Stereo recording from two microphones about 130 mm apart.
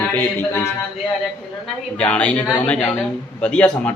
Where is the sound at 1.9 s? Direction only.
10° left (ahead or behind).